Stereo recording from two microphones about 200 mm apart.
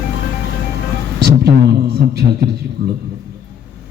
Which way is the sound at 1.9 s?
55° right (ahead or behind).